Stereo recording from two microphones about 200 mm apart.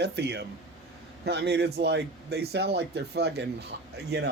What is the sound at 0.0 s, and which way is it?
A man's voice, 55° right (ahead or behind).